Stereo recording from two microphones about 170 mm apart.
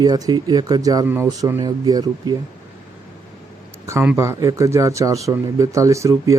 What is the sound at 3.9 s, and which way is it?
Speech, 15° right (ahead or behind).